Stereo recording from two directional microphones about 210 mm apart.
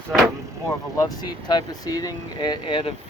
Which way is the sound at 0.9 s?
20° left (ahead or behind).